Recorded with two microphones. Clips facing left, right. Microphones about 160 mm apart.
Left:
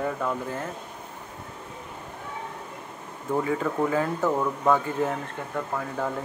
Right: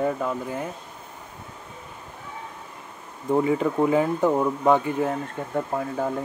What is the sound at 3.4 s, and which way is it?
Speech, 20° right (ahead or behind).